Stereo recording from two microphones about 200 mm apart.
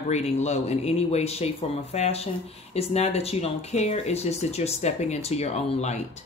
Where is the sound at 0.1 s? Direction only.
35° left (ahead or behind).